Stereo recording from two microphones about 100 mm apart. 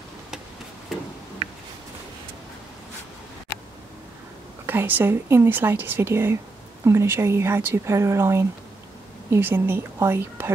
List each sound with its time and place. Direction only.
4.6 s speech: 20° right (ahead or behind)